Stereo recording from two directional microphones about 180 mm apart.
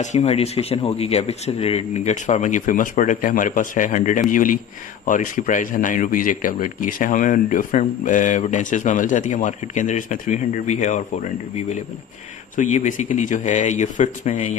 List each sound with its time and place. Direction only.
0.0 s speech: 40° left (ahead or behind)